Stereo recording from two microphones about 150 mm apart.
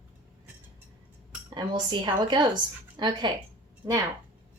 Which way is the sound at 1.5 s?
30° right (ahead or behind).